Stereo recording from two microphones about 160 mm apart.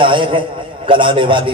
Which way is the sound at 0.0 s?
30° right (ahead or behind).